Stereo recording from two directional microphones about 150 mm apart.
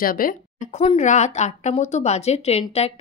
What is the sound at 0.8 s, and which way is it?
Speech, 45° left (ahead or behind).